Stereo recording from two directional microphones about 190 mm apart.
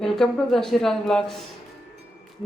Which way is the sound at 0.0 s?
Centre (ahead or behind).